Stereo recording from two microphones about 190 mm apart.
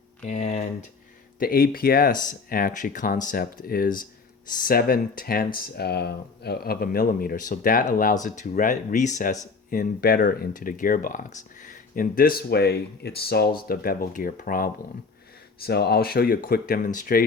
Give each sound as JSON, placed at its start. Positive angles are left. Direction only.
{"t": 0.3, "sound": "speech", "side_deg": 35}
{"t": 1.4, "sound": "speech", "side_deg": 50}